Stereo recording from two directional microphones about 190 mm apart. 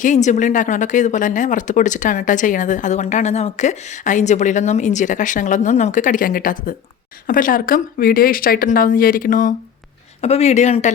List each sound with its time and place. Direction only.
0.0 s speech: 40° left (ahead or behind)
10.2 s speech: 35° left (ahead or behind)